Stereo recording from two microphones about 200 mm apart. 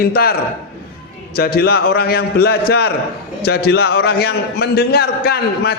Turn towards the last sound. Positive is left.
turn(degrees=55)  # may be behind; listen again after turning